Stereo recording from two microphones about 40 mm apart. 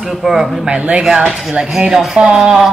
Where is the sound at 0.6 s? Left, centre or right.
Right.